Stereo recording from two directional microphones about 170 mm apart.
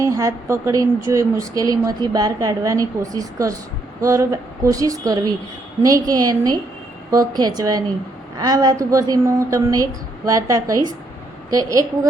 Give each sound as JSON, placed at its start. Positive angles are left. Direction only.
{"t": 0.0, "sound": "speech", "side_deg": -20}